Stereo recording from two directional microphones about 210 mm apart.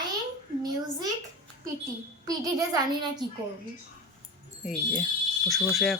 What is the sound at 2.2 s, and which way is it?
A child's voice, 20° right (ahead or behind).